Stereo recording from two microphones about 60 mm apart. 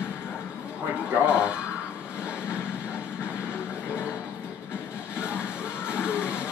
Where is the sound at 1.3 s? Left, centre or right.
Centre.